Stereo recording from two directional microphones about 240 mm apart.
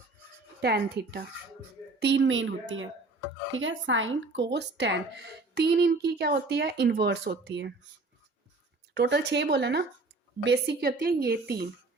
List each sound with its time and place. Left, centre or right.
0.6 s speech: right
9.0 s a woman's voice: right